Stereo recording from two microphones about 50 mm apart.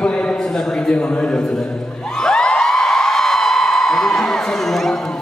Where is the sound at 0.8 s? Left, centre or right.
Left.